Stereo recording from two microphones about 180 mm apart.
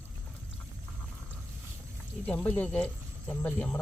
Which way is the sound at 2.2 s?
10° left (ahead or behind).